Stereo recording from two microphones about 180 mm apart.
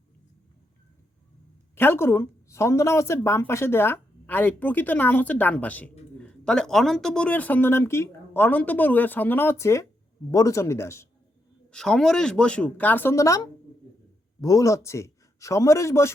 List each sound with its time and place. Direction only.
1.7 s speech: 10° left (ahead or behind)
11.7 s speech: 5° left (ahead or behind)